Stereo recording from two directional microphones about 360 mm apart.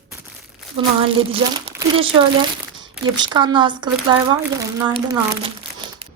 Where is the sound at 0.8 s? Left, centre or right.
Centre.